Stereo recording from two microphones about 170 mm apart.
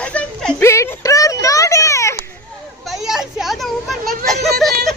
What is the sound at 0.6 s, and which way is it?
Speech, 15° left (ahead or behind).